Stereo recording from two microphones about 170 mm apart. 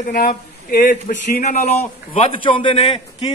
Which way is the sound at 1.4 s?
45° left (ahead or behind).